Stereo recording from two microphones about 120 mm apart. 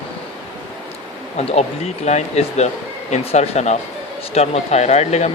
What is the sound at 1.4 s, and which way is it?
Speech, 60° left (ahead or behind).